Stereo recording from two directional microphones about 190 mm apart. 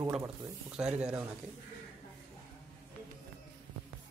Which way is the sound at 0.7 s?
5° right (ahead or behind).